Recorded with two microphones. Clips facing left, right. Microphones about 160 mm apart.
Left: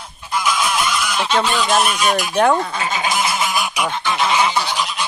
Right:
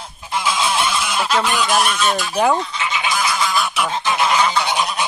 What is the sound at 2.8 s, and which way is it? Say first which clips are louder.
Goose: left 1 dB; 40° left (ahead or behind).